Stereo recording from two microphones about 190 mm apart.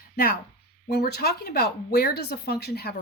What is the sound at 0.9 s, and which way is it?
Speech, 60° left (ahead or behind).